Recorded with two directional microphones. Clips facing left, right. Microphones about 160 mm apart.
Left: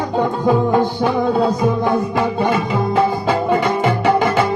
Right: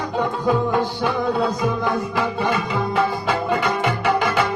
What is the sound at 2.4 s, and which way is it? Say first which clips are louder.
Music: left 4 dB; 30° left (ahead or behind).